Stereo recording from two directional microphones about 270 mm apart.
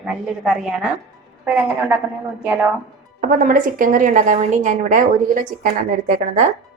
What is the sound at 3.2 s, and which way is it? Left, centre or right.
A woman's voice, right.